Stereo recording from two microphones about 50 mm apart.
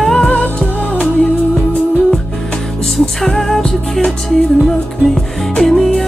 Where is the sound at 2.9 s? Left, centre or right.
Centre.